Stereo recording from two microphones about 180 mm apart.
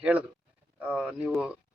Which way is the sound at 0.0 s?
10° right (ahead or behind).